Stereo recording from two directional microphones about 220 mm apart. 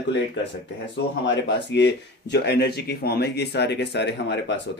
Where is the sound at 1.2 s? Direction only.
55° left (ahead or behind).